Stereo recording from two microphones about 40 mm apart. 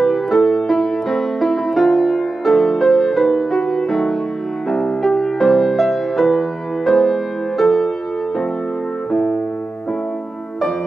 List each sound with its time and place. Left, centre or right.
0.0 s music: centre
9.1 s piano: centre